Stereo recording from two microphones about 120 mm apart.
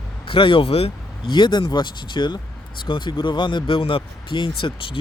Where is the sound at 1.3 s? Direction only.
40° left (ahead or behind).